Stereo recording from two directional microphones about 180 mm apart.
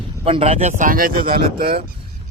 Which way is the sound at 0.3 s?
35° right (ahead or behind).